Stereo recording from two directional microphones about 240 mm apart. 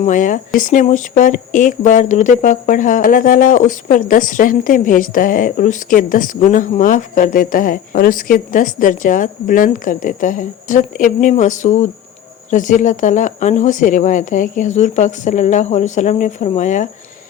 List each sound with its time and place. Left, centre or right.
0.0 s speech: left